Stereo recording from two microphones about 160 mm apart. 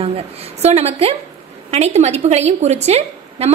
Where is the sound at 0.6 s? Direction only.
40° right (ahead or behind).